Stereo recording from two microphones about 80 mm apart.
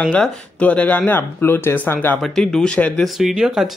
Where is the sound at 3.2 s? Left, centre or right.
Centre.